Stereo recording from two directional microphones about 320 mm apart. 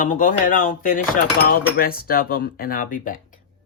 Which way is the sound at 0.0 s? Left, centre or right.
Left.